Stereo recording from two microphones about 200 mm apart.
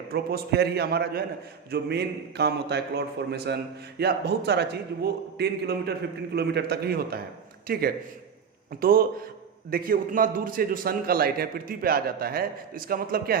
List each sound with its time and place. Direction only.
0.1 s a man's voice: 50° right (ahead or behind)